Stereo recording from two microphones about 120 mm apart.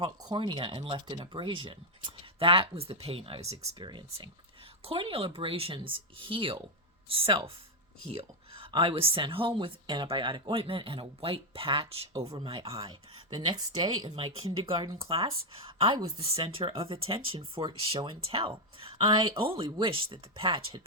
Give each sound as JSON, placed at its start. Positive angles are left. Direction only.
{"t": 0.0, "sound": "speech", "side_deg": -35}
{"t": 3.8, "sound": "speech", "side_deg": -40}
{"t": 12.1, "sound": "speech", "side_deg": -25}
{"t": 12.4, "sound": "speech", "side_deg": -50}
{"t": 13.3, "sound": "speech", "side_deg": -35}
{"t": 15.0, "sound": "speech", "side_deg": -50}